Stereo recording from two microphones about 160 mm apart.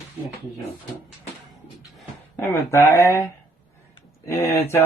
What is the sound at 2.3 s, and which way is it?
Speech, 15° left (ahead or behind).